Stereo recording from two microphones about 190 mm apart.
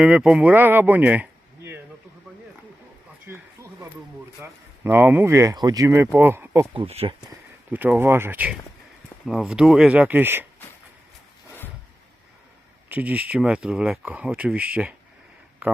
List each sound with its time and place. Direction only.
0.0 s speech: 5° right (ahead or behind)
3.2 s a sound: 15° right (ahead or behind)
4.4 s speech: 10° right (ahead or behind)
6.7 s speech: 30° right (ahead or behind)
7.7 s speech: 10° right (ahead or behind)
12.9 s speech: 10° right (ahead or behind)